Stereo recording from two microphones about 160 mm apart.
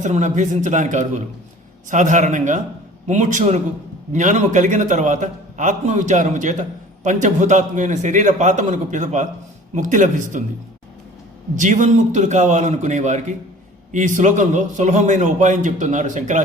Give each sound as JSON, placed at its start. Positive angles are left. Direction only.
{"t": 0.0, "sound": "a man's voice", "side_deg": -50}
{"t": 11.5, "sound": "a man's voice", "side_deg": -50}